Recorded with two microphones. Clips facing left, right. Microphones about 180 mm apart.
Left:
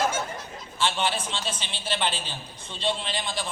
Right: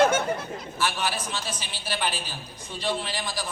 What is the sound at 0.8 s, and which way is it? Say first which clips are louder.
Speech: left 2 dB; 25° left (ahead or behind).